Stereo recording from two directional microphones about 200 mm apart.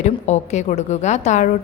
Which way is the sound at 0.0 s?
35° left (ahead or behind).